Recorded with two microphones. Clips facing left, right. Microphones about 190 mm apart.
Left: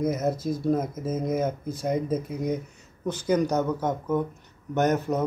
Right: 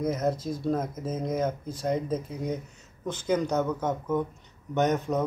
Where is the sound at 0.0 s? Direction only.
10° left (ahead or behind).